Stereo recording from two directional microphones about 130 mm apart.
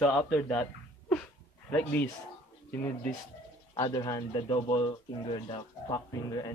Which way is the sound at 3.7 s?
30° left (ahead or behind).